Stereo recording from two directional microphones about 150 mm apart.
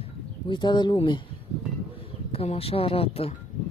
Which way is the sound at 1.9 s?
40° left (ahead or behind).